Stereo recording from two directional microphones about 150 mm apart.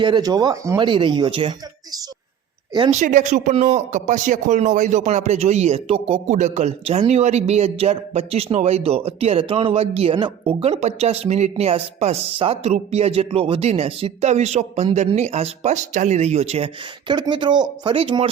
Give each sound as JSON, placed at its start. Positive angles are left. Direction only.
{"t": 0.0, "sound": "speech", "side_deg": -30}
{"t": 2.9, "sound": "speech", "side_deg": -60}
{"t": 3.5, "sound": "speech", "side_deg": -45}
{"t": 17.1, "sound": "speech", "side_deg": -30}